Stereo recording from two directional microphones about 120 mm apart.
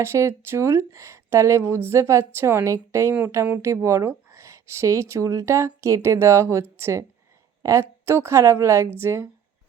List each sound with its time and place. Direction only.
0.0 s speech: 25° right (ahead or behind)